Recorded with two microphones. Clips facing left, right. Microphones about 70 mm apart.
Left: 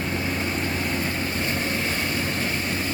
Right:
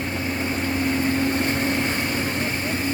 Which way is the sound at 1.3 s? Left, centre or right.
Right.